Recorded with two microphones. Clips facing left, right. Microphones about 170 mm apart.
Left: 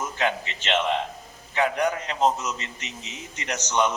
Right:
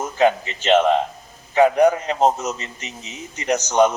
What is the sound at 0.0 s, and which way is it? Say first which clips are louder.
A man's voice: right 9 dB; 40° right (ahead or behind).